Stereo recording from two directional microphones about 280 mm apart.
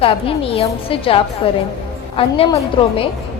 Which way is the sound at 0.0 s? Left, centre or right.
Centre.